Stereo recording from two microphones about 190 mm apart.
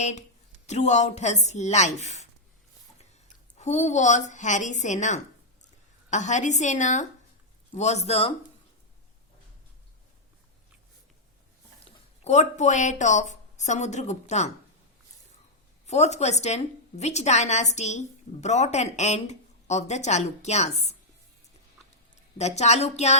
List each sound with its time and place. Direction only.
0.0 s a woman's voice: 35° left (ahead or behind)
3.6 s a woman's voice: 35° left (ahead or behind)
11.9 s speech: 35° left (ahead or behind)
15.9 s a woman's voice: 35° left (ahead or behind)
22.4 s a woman's voice: 35° left (ahead or behind)